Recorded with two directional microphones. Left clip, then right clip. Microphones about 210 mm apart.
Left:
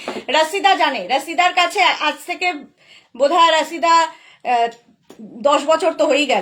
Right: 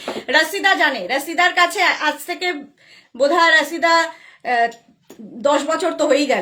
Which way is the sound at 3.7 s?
20° right (ahead or behind).